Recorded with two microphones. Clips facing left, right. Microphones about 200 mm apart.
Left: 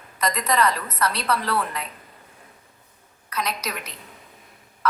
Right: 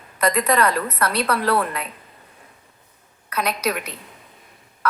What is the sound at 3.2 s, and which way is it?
Speech, 60° right (ahead or behind).